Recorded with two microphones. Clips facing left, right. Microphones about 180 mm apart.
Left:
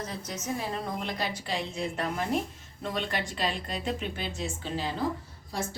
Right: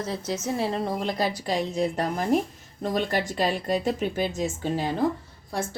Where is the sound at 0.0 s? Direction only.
30° right (ahead or behind).